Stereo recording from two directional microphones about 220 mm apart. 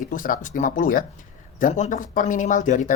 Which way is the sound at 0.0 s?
35° left (ahead or behind).